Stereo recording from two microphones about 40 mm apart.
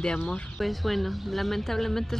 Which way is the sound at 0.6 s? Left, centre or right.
Centre.